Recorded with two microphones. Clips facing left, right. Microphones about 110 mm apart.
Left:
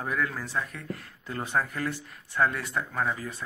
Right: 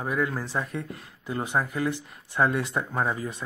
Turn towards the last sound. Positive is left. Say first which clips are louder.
# right 2 dB
turn(degrees=-20)  # may be behind; listen again after turning